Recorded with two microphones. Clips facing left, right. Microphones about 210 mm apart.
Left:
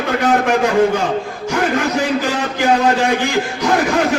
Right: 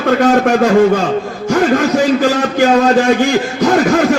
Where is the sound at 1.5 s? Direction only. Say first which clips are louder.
Right 6 dB; 55° right (ahead or behind).